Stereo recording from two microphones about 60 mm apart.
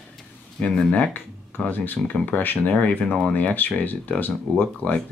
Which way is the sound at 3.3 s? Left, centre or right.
Left.